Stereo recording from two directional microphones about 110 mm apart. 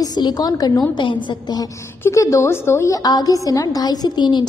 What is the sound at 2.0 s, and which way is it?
A woman's voice, 30° left (ahead or behind).